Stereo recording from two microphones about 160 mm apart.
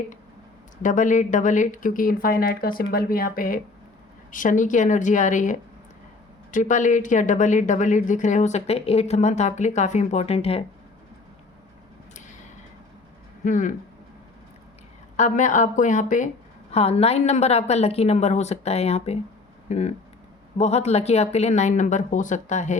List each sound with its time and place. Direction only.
0.8 s speech: 50° left (ahead or behind)
13.4 s speech: 55° left (ahead or behind)
15.1 s speech: 50° left (ahead or behind)
16.7 s a woman's voice: 40° left (ahead or behind)